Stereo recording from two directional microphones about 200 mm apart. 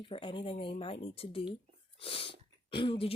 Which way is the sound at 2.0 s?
25° left (ahead or behind).